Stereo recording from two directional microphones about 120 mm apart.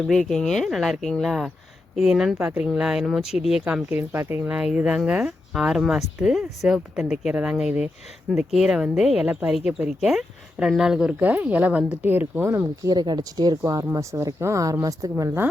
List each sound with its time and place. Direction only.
0.1 s speech: centre (ahead or behind); by 12.9 s 20° right (ahead or behind)
12.9 s speech: 35° right (ahead or behind)